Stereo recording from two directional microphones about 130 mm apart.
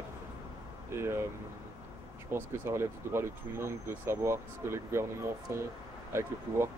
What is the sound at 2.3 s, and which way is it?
Speech, 20° right (ahead or behind).